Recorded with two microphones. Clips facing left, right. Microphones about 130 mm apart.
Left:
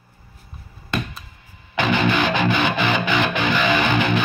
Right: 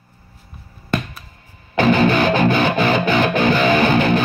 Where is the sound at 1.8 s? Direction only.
40° right (ahead or behind).